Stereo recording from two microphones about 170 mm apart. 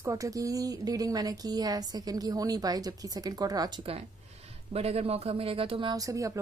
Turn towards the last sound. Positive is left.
turn(degrees=-20)  # may be behind; listen again after turning